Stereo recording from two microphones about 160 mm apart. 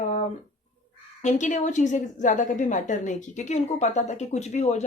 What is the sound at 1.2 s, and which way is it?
A woman's voice, 50° left (ahead or behind).